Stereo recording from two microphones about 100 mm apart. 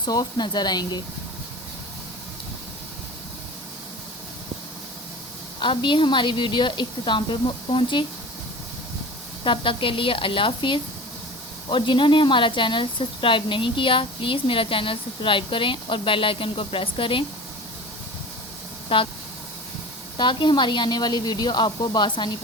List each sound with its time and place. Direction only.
0.0 s a woman's voice: 45° left (ahead or behind)
5.5 s a woman's voice: 55° left (ahead or behind)
9.4 s speech: 60° left (ahead or behind)
18.9 s speech: 65° left (ahead or behind)
20.1 s a woman's voice: 50° left (ahead or behind)